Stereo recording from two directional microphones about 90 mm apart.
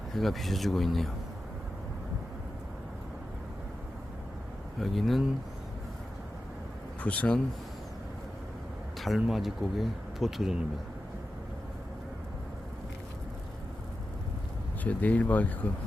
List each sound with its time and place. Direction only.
0.2 s speech: centre (ahead or behind)
4.8 s speech: centre (ahead or behind)
7.0 s speech: 15° left (ahead or behind)
9.0 s speech: centre (ahead or behind)
14.8 s speech: 15° left (ahead or behind)